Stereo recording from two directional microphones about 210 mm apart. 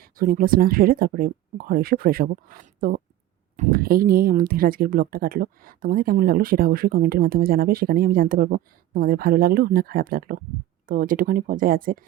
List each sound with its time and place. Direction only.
0.0 s speech: 40° right (ahead or behind)